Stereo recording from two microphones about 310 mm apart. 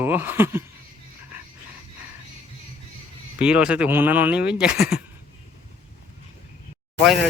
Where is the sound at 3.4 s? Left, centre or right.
Centre.